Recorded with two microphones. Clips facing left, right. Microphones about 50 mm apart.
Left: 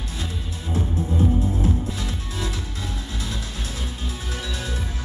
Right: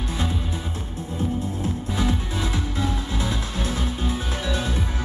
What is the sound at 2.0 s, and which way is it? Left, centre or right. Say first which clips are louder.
Music: right 6 dB; right.